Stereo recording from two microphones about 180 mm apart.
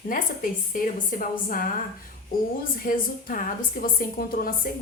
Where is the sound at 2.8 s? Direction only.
50° left (ahead or behind).